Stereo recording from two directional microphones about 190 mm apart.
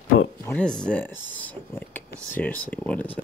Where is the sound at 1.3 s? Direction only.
10° left (ahead or behind).